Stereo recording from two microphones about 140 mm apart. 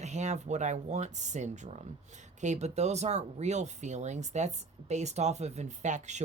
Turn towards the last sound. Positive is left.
turn(degrees=-55)  # may be behind; listen again after turning